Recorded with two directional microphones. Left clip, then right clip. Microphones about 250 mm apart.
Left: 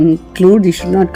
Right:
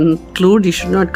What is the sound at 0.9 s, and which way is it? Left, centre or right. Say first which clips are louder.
Speech: left 2 dB; right.